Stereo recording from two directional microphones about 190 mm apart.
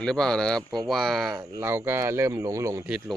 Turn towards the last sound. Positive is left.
turn(degrees=-5)  # may be behind; listen again after turning